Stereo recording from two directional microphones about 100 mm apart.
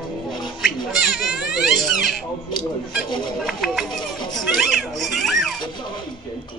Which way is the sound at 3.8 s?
50° left (ahead or behind).